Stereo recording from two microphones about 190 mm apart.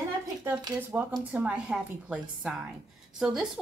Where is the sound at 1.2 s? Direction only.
10° right (ahead or behind).